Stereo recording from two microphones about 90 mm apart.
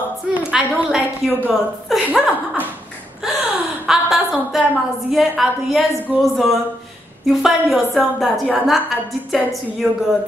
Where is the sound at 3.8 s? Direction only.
5° right (ahead or behind).